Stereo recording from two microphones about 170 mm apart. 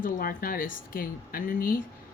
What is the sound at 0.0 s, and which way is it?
Speech, 60° left (ahead or behind).